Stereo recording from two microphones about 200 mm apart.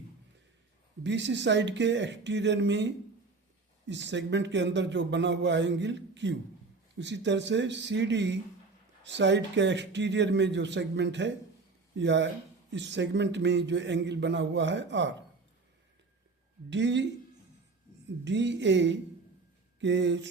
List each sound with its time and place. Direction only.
1.0 s speech: 65° right (ahead or behind)
16.6 s speech: 65° right (ahead or behind)
18.3 s speech: 60° right (ahead or behind)